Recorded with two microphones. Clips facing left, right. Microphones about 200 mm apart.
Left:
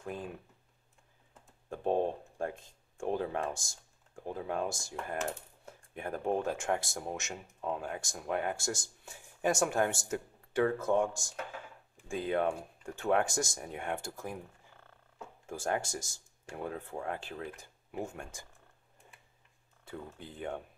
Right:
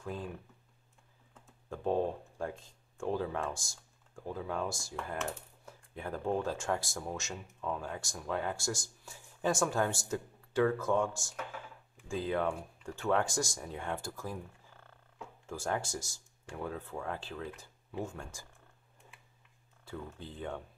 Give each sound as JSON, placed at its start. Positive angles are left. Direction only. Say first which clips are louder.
{"t": 0.0, "sound": "speech", "louder": "even", "side_deg": 20}
{"t": 1.7, "sound": "speech", "louder": "left 1 dB", "side_deg": 20}
{"t": 5.1, "sound": "typing", "louder": "left 3 dB", "side_deg": 40}
{"t": 6.1, "sound": "speech", "louder": "left 1 dB", "side_deg": 20}
{"t": 15.7, "sound": "speech", "louder": "left 2 dB", "side_deg": 20}
{"t": 19.8, "sound": "speech", "louder": "right 1 dB", "side_deg": 20}